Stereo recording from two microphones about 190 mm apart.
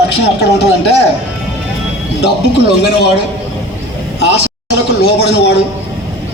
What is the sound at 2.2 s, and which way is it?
Speech, 60° left (ahead or behind).